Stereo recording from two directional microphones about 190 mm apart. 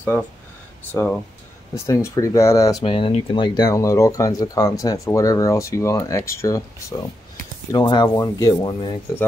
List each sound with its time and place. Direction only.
0.9 s speech: 10° left (ahead or behind)